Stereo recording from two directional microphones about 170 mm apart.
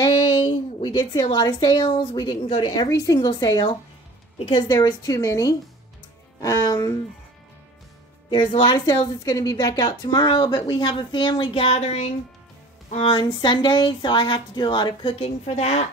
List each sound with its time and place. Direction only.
0.0 s a sound: 25° left (ahead or behind)
0.8 s a woman's voice: 25° left (ahead or behind)
8.3 s a woman's voice: 30° left (ahead or behind)